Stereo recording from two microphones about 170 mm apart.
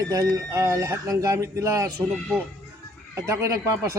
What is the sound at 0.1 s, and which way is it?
A man's voice, 20° right (ahead or behind).